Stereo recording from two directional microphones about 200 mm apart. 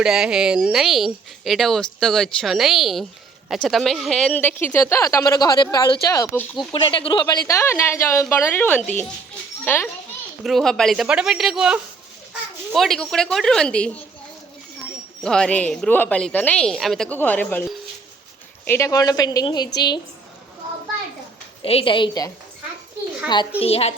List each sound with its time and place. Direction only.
0.0 s speech: 5° right (ahead or behind)
6.8 s speech: 25° left (ahead or behind); by 13.9 s 5° left (ahead or behind)
15.2 s speech: 5° left (ahead or behind); by 19.6 s 20° left (ahead or behind)
21.6 s a woman's voice: 30° left (ahead or behind)
23.6 s a woman's voice: 30° left (ahead or behind)